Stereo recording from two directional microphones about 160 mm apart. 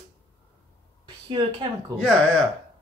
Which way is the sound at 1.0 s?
25° right (ahead or behind).